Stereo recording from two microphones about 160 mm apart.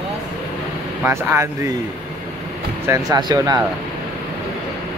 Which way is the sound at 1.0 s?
15° right (ahead or behind).